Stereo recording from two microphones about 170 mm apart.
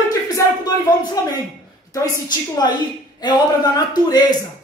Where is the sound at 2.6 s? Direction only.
25° left (ahead or behind).